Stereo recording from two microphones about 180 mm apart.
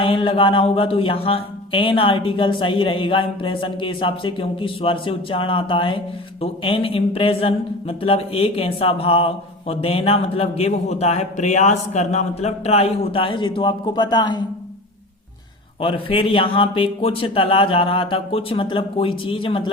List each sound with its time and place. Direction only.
0.0 s a man's voice: 30° left (ahead or behind)
15.8 s speech: 30° left (ahead or behind)